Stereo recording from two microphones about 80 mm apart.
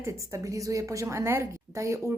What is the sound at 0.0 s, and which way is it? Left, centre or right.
A woman's voice, right.